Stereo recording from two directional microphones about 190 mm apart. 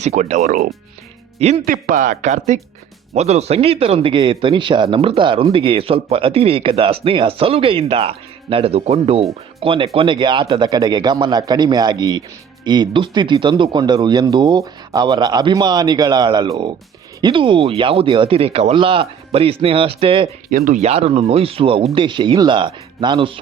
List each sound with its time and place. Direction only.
0.0 s speech: 40° right (ahead or behind)
1.4 s speech: 35° right (ahead or behind)
1.6 s speech: 45° right (ahead or behind); by 20.3 s 30° right (ahead or behind)
20.5 s speech: 45° right (ahead or behind); by 23.4 s 25° right (ahead or behind)